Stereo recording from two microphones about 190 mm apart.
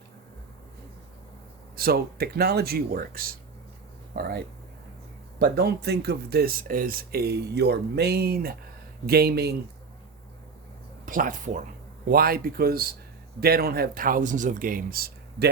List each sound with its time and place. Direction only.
1.7 s speech: 55° right (ahead or behind)
11.0 s speech: 45° right (ahead or behind)